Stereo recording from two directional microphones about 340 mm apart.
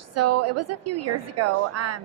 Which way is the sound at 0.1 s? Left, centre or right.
Right.